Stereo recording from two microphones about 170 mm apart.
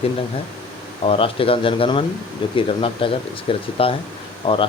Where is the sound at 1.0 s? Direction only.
30° left (ahead or behind).